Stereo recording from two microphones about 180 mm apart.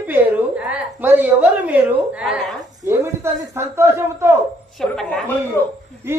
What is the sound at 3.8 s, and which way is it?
Speech, 15° right (ahead or behind).